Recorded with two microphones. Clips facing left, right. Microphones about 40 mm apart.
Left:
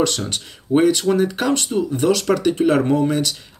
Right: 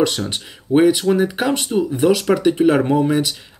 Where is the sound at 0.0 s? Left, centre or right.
Centre.